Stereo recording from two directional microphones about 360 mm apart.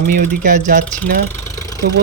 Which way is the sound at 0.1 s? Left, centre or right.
Right.